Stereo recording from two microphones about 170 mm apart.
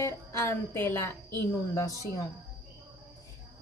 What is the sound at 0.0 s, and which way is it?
Music, 15° left (ahead or behind).